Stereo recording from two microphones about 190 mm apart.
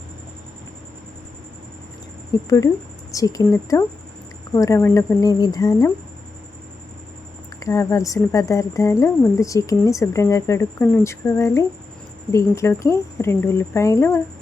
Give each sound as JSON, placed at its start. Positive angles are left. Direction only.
{"t": 2.3, "sound": "speech", "side_deg": 20}
{"t": 7.6, "sound": "speech", "side_deg": 15}